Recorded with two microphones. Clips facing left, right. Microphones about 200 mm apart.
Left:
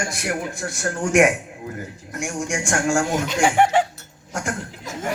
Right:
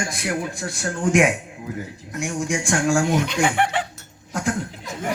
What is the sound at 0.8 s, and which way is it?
A man's voice, 55° left (ahead or behind).